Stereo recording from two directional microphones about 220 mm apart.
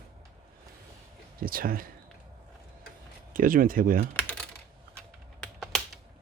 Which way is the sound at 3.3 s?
40° right (ahead or behind).